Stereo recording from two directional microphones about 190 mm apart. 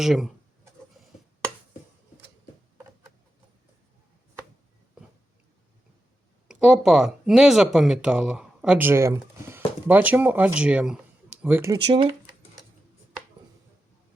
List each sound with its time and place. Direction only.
0.0 s speech: centre (ahead or behind)
6.5 s speech: 5° right (ahead or behind)
11.9 s speech: 30° right (ahead or behind)